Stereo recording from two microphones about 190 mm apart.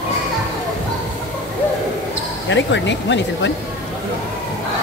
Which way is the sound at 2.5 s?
70° left (ahead or behind).